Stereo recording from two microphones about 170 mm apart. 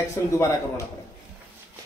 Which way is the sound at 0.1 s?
15° left (ahead or behind).